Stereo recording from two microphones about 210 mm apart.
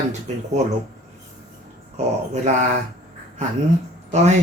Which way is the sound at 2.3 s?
35° right (ahead or behind).